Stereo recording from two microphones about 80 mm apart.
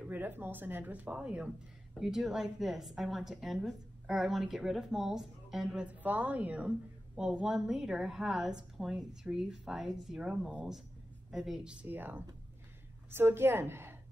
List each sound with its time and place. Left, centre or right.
0.1 s a woman's voice: right; by 11.7 s centre
11.8 s speech: right